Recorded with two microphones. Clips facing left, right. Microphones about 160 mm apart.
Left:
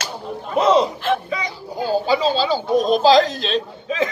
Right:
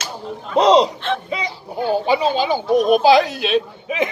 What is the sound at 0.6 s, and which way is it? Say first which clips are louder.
Speech: right 3 dB; 80° right.